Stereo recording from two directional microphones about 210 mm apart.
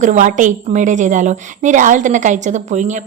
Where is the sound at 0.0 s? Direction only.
35° right (ahead or behind).